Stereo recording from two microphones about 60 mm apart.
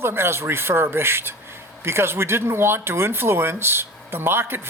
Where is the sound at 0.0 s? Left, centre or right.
Right.